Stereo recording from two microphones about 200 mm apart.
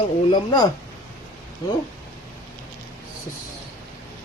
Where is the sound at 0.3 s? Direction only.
20° left (ahead or behind).